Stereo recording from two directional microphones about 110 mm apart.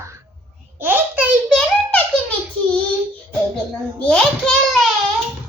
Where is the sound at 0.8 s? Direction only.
15° right (ahead or behind).